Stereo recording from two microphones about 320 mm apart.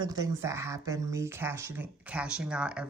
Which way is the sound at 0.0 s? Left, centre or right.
Centre.